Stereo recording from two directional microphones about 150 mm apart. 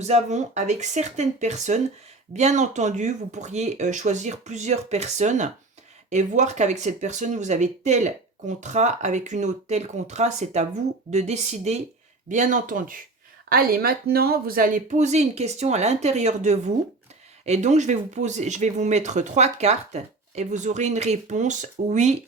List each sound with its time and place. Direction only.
0.0 s speech: 50° right (ahead or behind); by 13.0 s 65° right (ahead or behind)
13.5 s speech: 80° right; by 22.2 s 50° right (ahead or behind)